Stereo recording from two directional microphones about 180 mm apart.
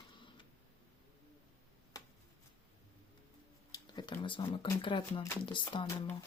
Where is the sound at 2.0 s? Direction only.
20° left (ahead or behind).